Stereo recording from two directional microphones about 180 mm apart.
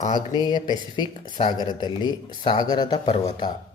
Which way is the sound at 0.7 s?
25° left (ahead or behind).